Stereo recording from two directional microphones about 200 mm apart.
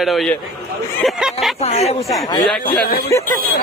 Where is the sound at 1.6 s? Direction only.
30° left (ahead or behind).